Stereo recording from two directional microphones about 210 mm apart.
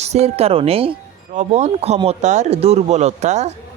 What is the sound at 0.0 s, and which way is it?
Speech, 30° right (ahead or behind).